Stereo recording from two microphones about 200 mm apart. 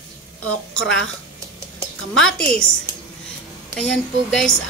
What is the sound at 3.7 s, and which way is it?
Speech, centre (ahead or behind).